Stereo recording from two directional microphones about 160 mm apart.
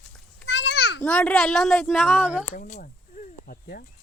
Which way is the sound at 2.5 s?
50° left (ahead or behind).